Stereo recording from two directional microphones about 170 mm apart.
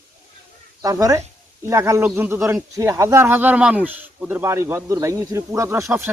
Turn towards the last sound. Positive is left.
turn(degrees=-15)  # may be behind; listen again after turning